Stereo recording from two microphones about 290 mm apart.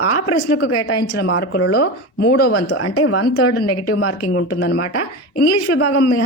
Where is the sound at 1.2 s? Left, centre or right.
Left.